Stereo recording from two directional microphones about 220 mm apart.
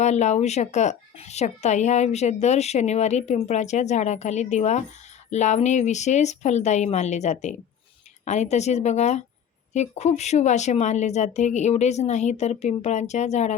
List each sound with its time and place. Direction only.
0.0 s speech: 30° left (ahead or behind)